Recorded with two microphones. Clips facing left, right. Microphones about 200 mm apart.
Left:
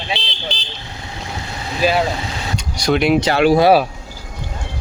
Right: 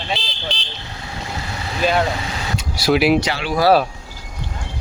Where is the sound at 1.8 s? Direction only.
5° left (ahead or behind).